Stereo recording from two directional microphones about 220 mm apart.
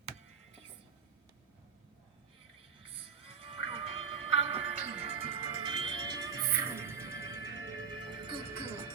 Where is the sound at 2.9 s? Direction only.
25° right (ahead or behind).